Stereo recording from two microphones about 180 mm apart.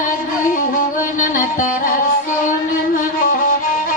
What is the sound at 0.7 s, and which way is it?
Music, 45° left (ahead or behind).